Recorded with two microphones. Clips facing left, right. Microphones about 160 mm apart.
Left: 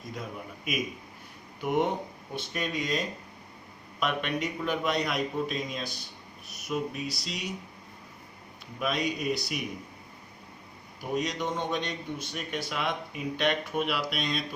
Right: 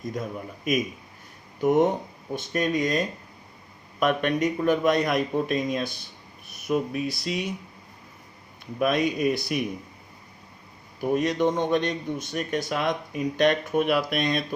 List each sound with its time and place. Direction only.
0.1 s speech: 45° right (ahead or behind)
8.8 s speech: 50° right (ahead or behind)
11.1 s speech: 55° right (ahead or behind)